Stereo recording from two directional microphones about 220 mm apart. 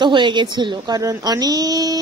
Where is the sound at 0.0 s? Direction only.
20° right (ahead or behind).